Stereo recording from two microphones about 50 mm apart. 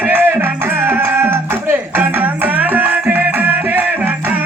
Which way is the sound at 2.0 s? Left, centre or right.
Right.